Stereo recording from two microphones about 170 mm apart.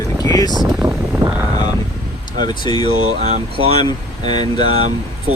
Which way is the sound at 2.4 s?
25° left (ahead or behind).